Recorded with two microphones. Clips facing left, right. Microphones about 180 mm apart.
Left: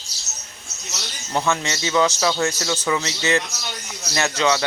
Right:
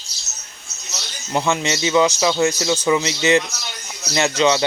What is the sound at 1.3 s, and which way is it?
A man's voice, 15° right (ahead or behind).